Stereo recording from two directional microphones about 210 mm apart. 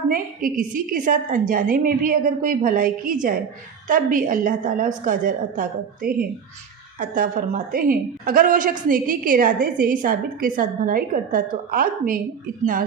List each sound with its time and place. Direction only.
0.1 s a woman's voice: 40° right (ahead or behind)